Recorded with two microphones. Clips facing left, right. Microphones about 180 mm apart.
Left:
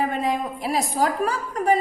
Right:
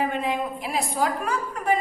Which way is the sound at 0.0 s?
40° left (ahead or behind).